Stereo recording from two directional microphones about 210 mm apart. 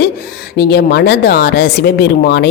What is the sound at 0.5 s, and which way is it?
Speech, 50° left (ahead or behind).